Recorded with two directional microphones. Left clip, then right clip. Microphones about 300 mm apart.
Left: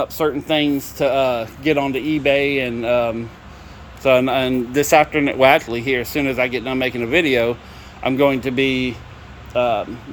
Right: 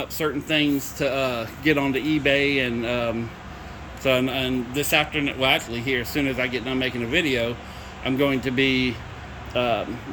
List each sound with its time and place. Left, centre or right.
0.0 s speech: left
0.9 s speech: centre